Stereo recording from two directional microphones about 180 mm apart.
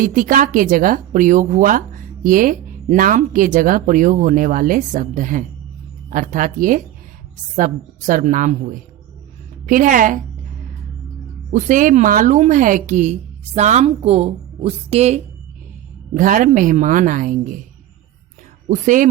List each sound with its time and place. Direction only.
0.0 s a woman's voice: 45° right (ahead or behind)
9.6 s a woman's voice: 50° right (ahead or behind)
11.5 s a woman's voice: 45° right (ahead or behind)
16.1 s a woman's voice: 45° right (ahead or behind)
18.7 s a woman's voice: 45° right (ahead or behind)